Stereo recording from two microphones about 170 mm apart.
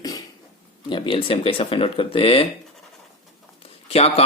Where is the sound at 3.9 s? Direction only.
35° left (ahead or behind).